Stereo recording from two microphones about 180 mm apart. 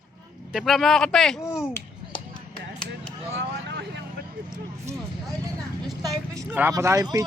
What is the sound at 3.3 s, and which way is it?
Vehicle, 75° right (ahead or behind).